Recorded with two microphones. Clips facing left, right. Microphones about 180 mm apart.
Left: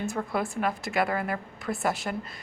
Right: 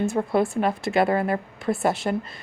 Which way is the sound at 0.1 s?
25° right (ahead or behind).